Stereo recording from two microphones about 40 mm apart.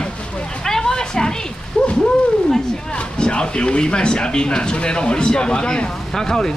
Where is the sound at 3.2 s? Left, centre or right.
Left.